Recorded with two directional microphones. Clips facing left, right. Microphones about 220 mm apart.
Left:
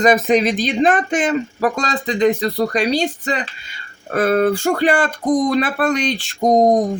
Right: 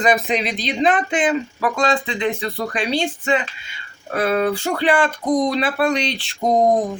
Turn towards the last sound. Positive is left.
turn(degrees=40)  # may be behind; listen again after turning